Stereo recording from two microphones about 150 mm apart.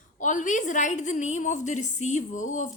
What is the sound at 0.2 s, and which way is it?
A woman's voice, 55° left (ahead or behind).